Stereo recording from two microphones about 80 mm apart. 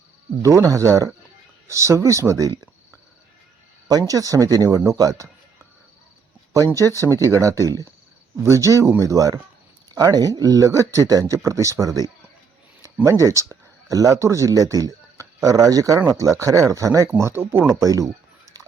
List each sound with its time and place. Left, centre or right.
0.4 s speech: right
3.8 s speech: right
6.7 s speech: right
13.1 s speech: right
17.7 s speech: right